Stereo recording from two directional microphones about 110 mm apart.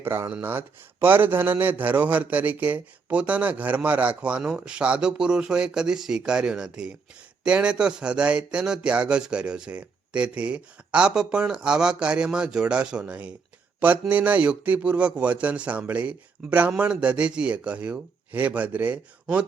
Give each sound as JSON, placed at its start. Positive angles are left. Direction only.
{"t": 0.0, "sound": "a man's voice", "side_deg": -20}